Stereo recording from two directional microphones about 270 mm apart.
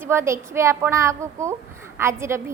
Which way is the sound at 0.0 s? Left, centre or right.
Centre.